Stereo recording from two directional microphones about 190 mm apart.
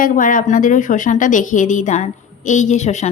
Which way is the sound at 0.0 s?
45° left (ahead or behind).